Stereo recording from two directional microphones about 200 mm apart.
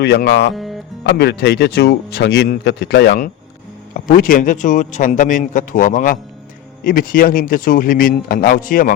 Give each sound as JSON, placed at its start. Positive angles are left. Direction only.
{"t": 0.0, "sound": "speech", "side_deg": 55}
{"t": 0.5, "sound": "music", "side_deg": 0}
{"t": 1.0, "sound": "speech", "side_deg": 55}
{"t": 3.9, "sound": "a man's voice", "side_deg": 45}